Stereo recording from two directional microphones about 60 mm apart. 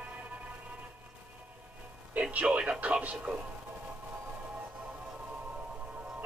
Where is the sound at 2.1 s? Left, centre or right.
Right.